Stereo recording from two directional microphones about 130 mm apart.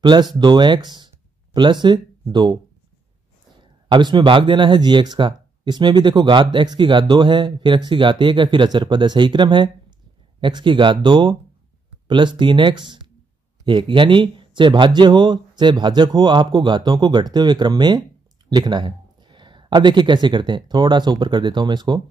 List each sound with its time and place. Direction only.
0.0 s speech: 35° right (ahead or behind)
3.6 s speech: 35° right (ahead or behind)